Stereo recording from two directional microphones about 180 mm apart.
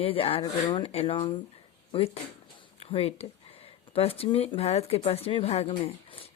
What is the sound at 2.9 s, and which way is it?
Speech, 35° left (ahead or behind).